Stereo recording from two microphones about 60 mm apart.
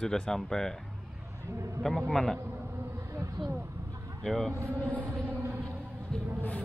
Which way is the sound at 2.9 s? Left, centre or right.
Right.